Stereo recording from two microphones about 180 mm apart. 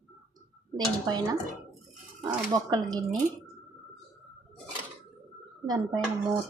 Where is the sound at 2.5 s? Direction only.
20° right (ahead or behind).